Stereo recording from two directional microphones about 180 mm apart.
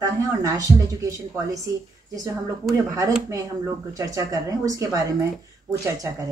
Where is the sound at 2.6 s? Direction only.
Centre (ahead or behind).